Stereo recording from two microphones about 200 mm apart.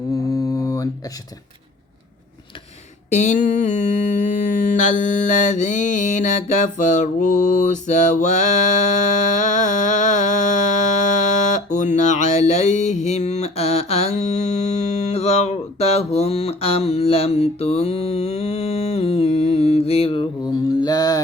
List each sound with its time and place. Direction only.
0.3 s a sound: 15° left (ahead or behind)
3.1 s mantra: 35° left (ahead or behind)
20.4 s mantra: 20° left (ahead or behind)